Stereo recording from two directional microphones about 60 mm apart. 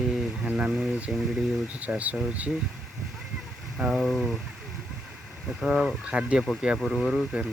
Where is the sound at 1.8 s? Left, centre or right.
Right.